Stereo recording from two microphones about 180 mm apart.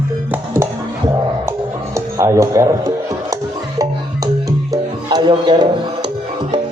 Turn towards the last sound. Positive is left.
turn(degrees=-25)  # may be behind; listen again after turning